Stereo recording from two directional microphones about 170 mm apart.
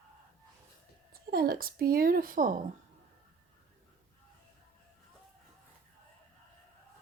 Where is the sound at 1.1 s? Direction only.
60° right (ahead or behind).